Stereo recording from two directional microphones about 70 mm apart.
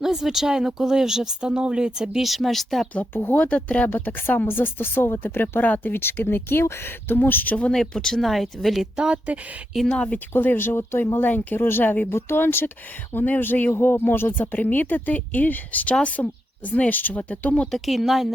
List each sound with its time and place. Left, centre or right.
0.0 s speech: centre
2.9 s speech: left
7.5 s speech: centre
9.0 s speech: centre
9.9 s speech: centre
10.3 s speech: left; by 17.7 s centre
17.7 s speech: centre